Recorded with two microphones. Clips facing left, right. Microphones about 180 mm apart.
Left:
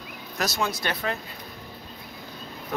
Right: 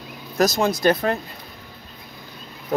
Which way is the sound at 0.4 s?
40° right (ahead or behind).